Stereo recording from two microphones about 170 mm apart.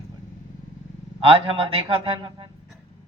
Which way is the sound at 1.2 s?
30° right (ahead or behind).